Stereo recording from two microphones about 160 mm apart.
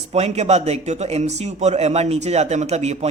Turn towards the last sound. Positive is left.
turn(degrees=-45)  # may be behind; listen again after turning